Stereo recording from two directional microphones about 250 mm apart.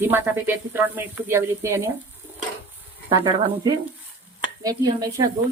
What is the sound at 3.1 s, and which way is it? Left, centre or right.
Speech, centre.